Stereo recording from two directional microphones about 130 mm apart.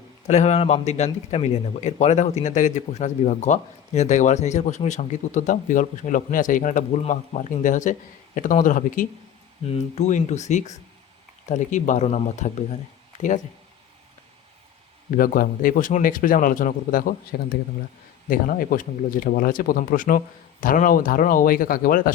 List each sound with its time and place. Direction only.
0.3 s a man's voice: 60° left (ahead or behind); by 6.8 s 85° left
7.1 s speech: 70° left (ahead or behind); by 9.0 s 90° left
9.7 s a man's voice: 60° left (ahead or behind)
13.1 s speech: 75° left (ahead or behind)
15.1 s speech: 90° left
18.3 s speech: 90° left